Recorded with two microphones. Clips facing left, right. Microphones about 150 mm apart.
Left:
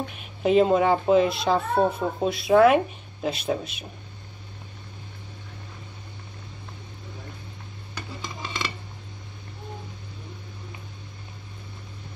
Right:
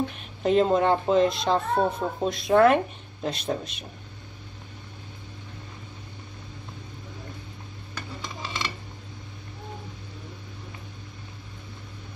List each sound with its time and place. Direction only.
0.1 s a child's voice: 5° left (ahead or behind)